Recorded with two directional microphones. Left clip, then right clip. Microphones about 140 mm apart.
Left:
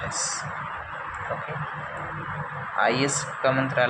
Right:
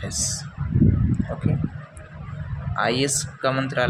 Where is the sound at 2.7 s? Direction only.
50° right (ahead or behind).